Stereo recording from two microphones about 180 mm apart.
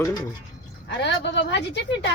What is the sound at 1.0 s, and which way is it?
A woman's voice, 75° left (ahead or behind).